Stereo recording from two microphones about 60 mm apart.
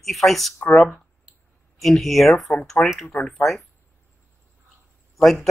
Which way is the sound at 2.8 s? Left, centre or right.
Left.